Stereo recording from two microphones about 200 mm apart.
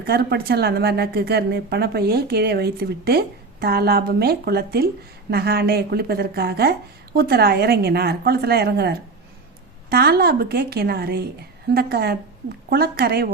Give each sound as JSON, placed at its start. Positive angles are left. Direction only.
{"t": 0.0, "sound": "speech", "side_deg": -50}